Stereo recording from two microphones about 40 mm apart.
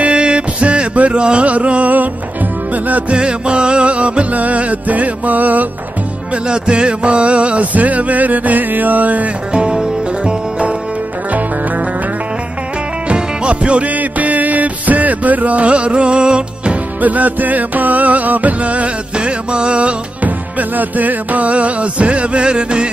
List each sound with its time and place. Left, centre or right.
0.0 s music: right
3.2 s music: right
6.3 s music: right
9.5 s music: right
11.3 s music: right
13.1 s music: right
17.0 s music: right
20.2 s music: right